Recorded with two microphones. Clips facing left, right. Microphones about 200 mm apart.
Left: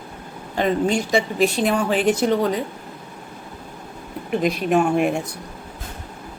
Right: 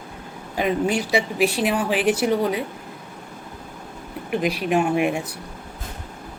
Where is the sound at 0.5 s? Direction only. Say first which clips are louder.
Left 2 dB; 10° right (ahead or behind).